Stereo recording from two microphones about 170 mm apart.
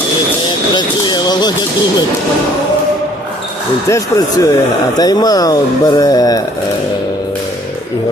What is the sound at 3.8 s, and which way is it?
Speech, 20° left (ahead or behind).